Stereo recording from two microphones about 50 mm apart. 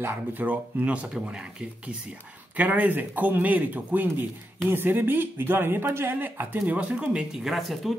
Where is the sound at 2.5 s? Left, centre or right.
Right.